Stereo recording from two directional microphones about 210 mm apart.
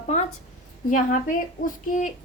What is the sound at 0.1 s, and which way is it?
Speech, 35° left (ahead or behind).